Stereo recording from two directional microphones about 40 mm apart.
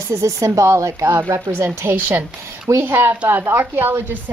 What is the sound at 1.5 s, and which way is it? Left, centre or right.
A woman's voice, right.